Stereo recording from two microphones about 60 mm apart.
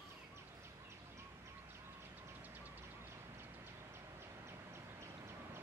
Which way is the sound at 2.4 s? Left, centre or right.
Right.